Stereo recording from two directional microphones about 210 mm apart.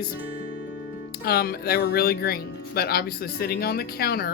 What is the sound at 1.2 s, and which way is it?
Speech, 45° left (ahead or behind).